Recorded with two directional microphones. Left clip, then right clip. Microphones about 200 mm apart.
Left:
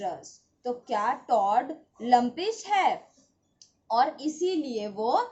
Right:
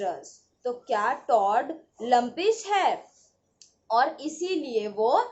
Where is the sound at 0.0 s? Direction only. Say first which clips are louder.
Right 3 dB; 20° left (ahead or behind).